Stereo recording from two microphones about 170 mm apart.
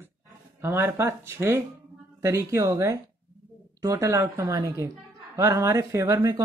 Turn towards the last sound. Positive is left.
turn(degrees=-20)  # may be behind; listen again after turning